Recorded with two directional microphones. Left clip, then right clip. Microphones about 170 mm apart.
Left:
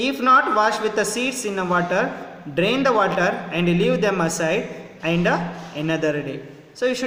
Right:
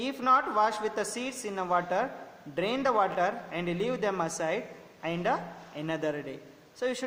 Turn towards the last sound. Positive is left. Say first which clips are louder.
# left 10 dB
turn(degrees=-35)  # may be behind; listen again after turning